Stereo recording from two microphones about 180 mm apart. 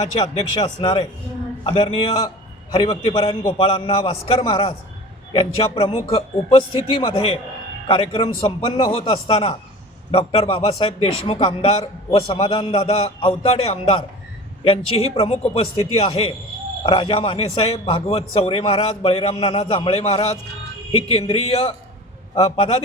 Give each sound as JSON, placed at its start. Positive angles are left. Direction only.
{"t": 0.0, "sound": "a man's voice", "side_deg": 20}